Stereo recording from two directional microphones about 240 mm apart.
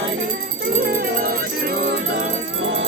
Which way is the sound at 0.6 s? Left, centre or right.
Right.